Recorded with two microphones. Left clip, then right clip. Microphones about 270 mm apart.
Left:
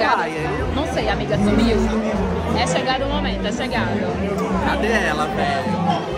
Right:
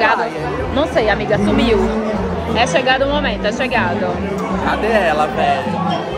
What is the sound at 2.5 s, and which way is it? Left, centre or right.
Speech, right.